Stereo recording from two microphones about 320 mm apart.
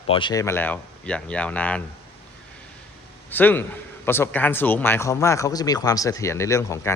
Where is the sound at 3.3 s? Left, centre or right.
Centre.